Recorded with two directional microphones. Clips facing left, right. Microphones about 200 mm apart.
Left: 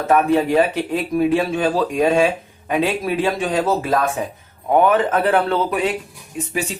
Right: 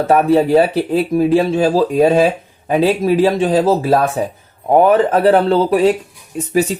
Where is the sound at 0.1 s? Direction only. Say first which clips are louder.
Right 4 dB; 35° right (ahead or behind).